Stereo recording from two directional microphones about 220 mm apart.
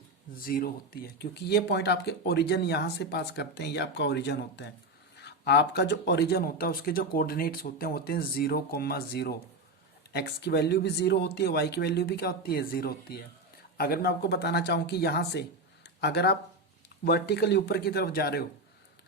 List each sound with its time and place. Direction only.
0.3 s speech: 40° left (ahead or behind)